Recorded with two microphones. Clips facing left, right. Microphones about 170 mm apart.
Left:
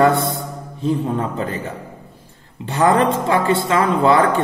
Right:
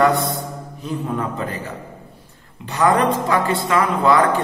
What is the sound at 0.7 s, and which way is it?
Speech, 30° left (ahead or behind).